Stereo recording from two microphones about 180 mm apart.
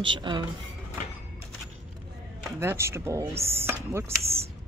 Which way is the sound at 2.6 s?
15° right (ahead or behind).